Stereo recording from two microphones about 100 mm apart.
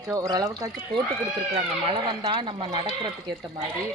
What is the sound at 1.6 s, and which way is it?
Speech, 55° right (ahead or behind).